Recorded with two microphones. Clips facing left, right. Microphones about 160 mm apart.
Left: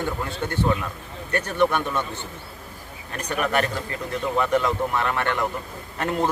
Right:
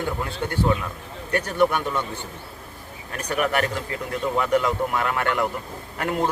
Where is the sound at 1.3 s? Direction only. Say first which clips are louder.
Right 1 dB; 10° right (ahead or behind).